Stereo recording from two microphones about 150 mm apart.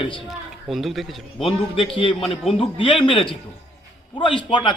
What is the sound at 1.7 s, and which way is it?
Speech, 35° left (ahead or behind).